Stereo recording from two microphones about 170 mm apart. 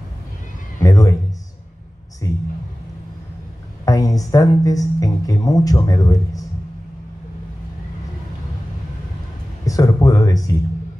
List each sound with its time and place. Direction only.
0.8 s speech: 20° left (ahead or behind)
2.2 s a man's voice: 20° left (ahead or behind)
3.8 s speech: 20° left (ahead or behind)
9.7 s speech: 20° left (ahead or behind)